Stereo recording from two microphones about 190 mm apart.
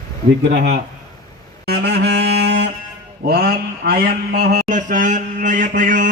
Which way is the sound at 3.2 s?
55° right (ahead or behind).